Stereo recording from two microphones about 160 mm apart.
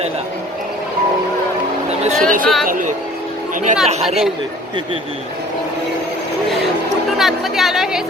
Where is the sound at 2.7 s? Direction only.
55° right (ahead or behind).